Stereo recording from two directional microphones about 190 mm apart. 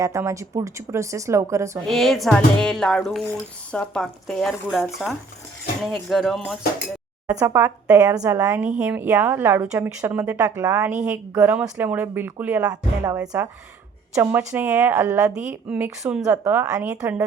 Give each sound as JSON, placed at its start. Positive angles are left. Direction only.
{"t": 0.0, "sound": "speech", "side_deg": -15}
{"t": 1.9, "sound": "speech", "side_deg": 0}
{"t": 7.3, "sound": "speech", "side_deg": -15}
{"t": 8.4, "sound": "speech", "side_deg": -5}
{"t": 14.2, "sound": "speech", "side_deg": -10}